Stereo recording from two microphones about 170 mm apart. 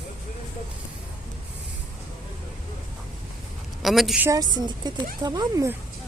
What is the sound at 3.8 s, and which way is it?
Speech, centre (ahead or behind).